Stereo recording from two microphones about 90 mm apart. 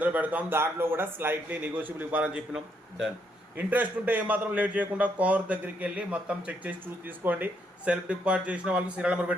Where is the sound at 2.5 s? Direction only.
5° right (ahead or behind).